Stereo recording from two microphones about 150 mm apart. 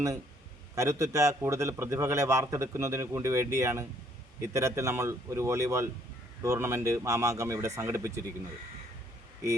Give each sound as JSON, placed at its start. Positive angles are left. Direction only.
{"t": 0.8, "sound": "a man's voice", "side_deg": -20}